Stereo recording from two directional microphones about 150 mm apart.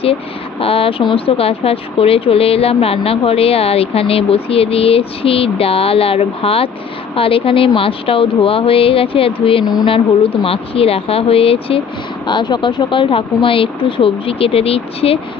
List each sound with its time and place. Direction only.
0.6 s speech: 40° left (ahead or behind)